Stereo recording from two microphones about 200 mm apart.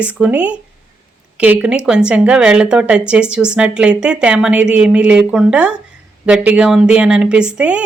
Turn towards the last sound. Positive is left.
turn(degrees=-5)  # may be behind; listen again after turning